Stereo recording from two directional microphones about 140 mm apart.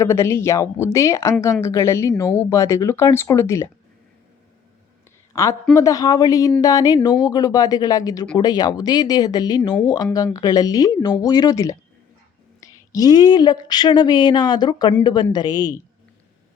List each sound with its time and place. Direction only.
0.0 s speech: 20° left (ahead or behind)
5.3 s a woman's voice: 20° left (ahead or behind)